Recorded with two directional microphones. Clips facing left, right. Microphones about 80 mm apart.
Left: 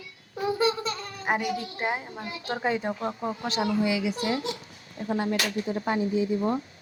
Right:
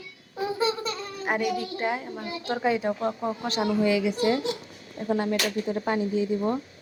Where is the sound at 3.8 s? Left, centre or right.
Right.